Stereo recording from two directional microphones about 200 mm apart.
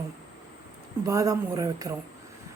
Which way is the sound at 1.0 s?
15° right (ahead or behind).